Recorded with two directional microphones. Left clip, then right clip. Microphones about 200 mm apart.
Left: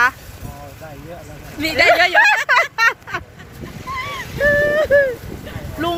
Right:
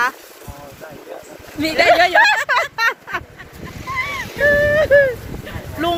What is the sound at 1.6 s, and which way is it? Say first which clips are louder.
Speech: even; 35° right (ahead or behind).